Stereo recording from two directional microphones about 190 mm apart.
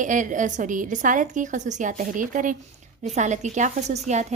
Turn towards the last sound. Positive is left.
turn(degrees=-35)  # may be behind; listen again after turning